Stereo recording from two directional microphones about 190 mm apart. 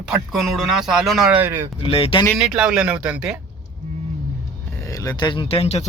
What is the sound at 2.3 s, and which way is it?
A man's voice, 5° right (ahead or behind).